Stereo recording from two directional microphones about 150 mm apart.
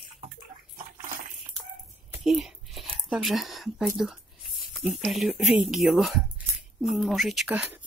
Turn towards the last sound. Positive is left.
turn(degrees=-5)  # may be behind; listen again after turning